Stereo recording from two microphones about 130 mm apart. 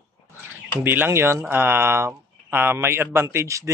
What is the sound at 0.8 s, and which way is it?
A man's voice, 20° right (ahead or behind).